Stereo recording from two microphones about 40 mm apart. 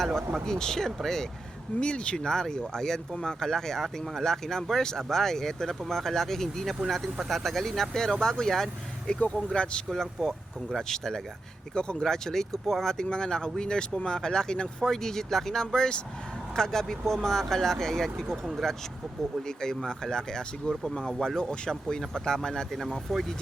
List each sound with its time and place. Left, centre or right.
0.3 s speech: centre
1.8 s speech: left
9.1 s speech: left
9.9 s speech: centre
14.8 s speech: centre
22.7 s speech: centre